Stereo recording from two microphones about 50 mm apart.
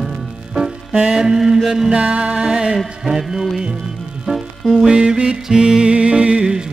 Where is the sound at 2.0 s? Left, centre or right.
Right.